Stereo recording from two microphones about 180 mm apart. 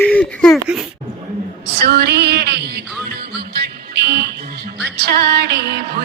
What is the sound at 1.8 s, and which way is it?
Music, 65° right (ahead or behind).